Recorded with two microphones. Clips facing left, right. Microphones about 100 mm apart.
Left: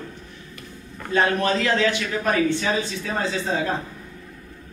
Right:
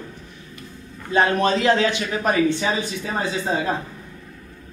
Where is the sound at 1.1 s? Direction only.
20° right (ahead or behind).